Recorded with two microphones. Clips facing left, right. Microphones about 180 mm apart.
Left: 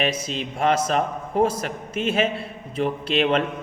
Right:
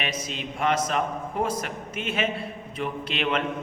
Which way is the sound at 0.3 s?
35° left (ahead or behind).